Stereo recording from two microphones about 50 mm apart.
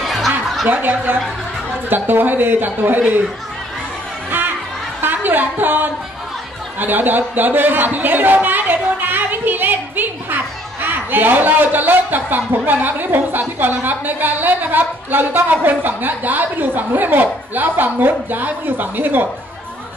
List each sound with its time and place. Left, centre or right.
0.0 s snicker: centre
0.7 s a woman's voice: right
5.0 s a sound: right
6.8 s a woman's voice: right